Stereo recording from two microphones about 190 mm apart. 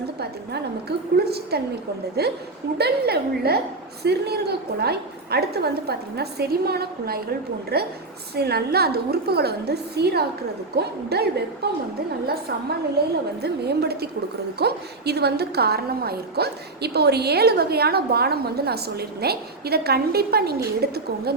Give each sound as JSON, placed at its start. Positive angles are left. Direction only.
{"t": 0.2, "sound": "a woman's voice", "side_deg": -60}